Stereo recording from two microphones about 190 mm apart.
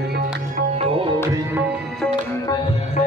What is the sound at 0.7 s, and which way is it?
Music, 30° right (ahead or behind).